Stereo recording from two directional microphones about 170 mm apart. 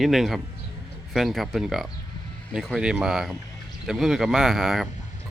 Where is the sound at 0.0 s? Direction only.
Centre (ahead or behind).